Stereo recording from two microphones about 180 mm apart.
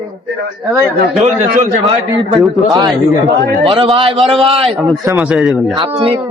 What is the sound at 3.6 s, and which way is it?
A man's voice, 30° right (ahead or behind).